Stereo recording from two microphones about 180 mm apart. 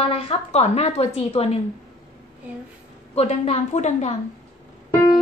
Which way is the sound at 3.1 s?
35° left (ahead or behind).